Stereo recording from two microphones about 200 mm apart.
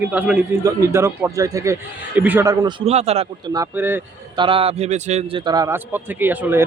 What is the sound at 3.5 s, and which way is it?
Speech, 15° right (ahead or behind).